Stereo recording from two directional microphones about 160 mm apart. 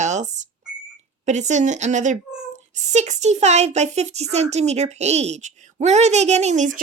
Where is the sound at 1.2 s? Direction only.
45° right (ahead or behind).